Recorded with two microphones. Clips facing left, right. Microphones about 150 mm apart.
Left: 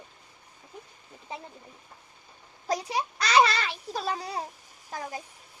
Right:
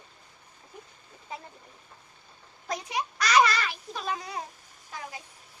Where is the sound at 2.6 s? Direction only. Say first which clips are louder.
Left 3 dB; 35° left (ahead or behind).